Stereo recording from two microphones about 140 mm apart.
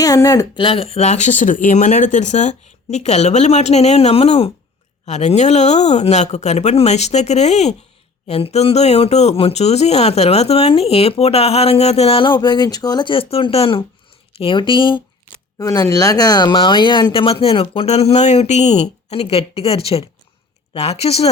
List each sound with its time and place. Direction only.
0.0 s speech: 25° left (ahead or behind)
0.5 s speech: 40° left (ahead or behind)
15.5 s speech: 25° left (ahead or behind); by 21.2 s 45° left (ahead or behind)